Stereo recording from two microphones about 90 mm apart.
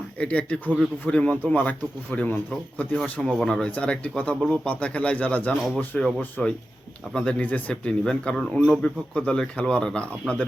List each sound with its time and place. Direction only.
0.2 s speech: 10° left (ahead or behind)
2.9 s speech: 10° left (ahead or behind)